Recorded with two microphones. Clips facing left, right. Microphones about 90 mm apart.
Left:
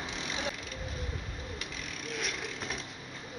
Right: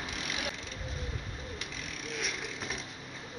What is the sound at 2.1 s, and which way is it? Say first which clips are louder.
Vehicle: left 1 dB; centre (ahead or behind).